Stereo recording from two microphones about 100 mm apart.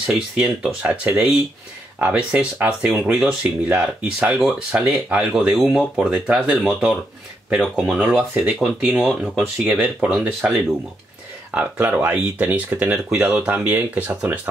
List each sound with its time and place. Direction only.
0.0 s speech: 10° right (ahead or behind)
5.6 s speech: centre (ahead or behind)
5.9 s speech: 10° right (ahead or behind)
7.6 s speech: 10° left (ahead or behind)
7.9 s speech: 5° right (ahead or behind)